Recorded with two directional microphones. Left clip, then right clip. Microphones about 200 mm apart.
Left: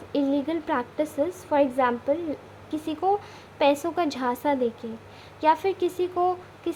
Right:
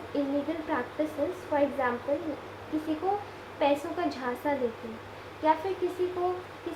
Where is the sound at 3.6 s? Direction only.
40° left (ahead or behind).